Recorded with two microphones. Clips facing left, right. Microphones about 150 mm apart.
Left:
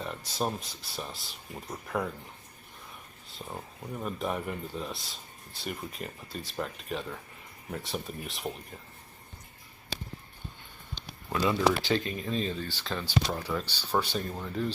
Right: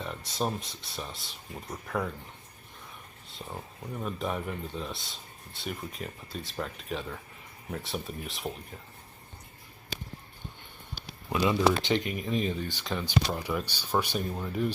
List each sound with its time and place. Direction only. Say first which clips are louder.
0.0 s speech: even; centre (ahead or behind)
3.2 s speech: even; centre (ahead or behind)
11.3 s speech: right 1 dB; 15° right (ahead or behind)